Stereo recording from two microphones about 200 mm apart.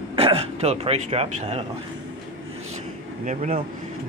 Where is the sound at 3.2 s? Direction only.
35° right (ahead or behind).